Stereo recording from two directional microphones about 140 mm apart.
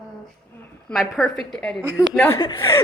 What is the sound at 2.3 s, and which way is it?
Speech, 30° left (ahead or behind).